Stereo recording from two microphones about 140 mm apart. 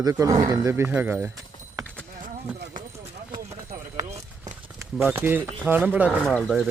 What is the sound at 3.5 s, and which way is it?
Clip-clop, 50° right (ahead or behind).